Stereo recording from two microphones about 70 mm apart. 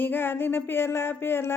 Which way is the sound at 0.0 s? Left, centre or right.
Left.